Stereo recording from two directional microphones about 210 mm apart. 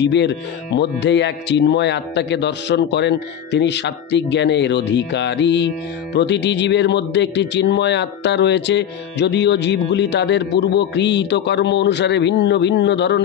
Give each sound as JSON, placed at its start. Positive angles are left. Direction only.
{"t": 0.0, "sound": "speech", "side_deg": 55}